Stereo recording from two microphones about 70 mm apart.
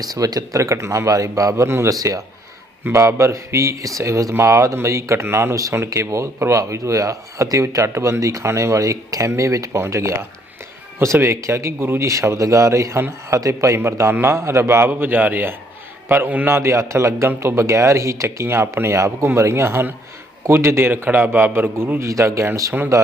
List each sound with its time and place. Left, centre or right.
0.0 s speech: right
1.6 s a man's voice: right
1.9 s speech: right
11.8 s a man's voice: right
12.0 s a man's voice: right
16.5 s a man's voice: right